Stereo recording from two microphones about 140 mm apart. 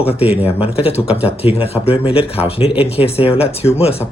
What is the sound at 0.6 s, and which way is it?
Speech, 45° left (ahead or behind).